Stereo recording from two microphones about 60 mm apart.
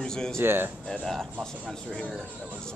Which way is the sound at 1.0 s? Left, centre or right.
Centre.